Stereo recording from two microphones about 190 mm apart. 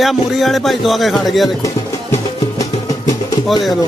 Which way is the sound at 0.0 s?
Centre (ahead or behind).